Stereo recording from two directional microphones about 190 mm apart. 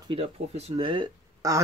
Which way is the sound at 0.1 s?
35° right (ahead or behind).